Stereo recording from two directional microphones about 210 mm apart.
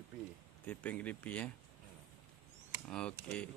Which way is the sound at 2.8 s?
5° left (ahead or behind).